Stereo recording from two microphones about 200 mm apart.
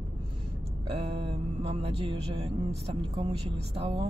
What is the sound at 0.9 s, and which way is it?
Mantra, 25° right (ahead or behind).